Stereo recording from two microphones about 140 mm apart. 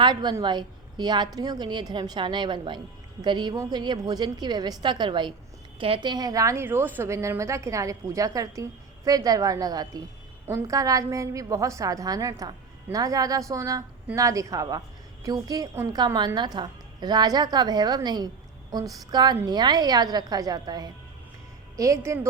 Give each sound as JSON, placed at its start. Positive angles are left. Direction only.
{"t": 0.0, "sound": "a woman's voice", "side_deg": -30}